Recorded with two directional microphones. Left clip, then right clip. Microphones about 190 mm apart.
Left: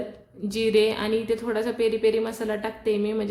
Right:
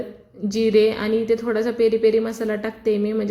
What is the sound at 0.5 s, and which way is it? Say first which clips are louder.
A woman's voice: right 4 dB; 20° right (ahead or behind).